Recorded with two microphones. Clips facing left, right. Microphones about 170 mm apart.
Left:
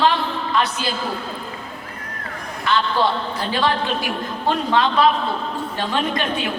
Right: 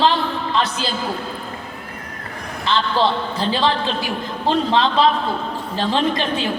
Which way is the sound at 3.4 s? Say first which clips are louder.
Right 2 dB; 30° right (ahead or behind).